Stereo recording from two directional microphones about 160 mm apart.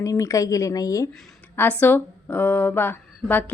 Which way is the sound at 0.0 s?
20° left (ahead or behind).